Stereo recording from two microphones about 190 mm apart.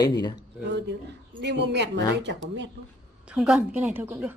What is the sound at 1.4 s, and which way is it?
Speech, 65° right (ahead or behind).